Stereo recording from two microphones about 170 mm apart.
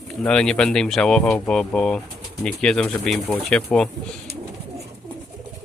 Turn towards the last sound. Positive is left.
turn(degrees=-70)  # may be behind; listen again after turning